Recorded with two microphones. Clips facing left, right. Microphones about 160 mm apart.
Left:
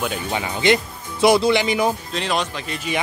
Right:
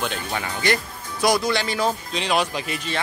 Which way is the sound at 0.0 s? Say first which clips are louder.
Left 3 dB; 10° left (ahead or behind).